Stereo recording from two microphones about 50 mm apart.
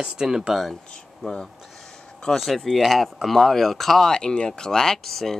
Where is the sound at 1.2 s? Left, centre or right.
Centre.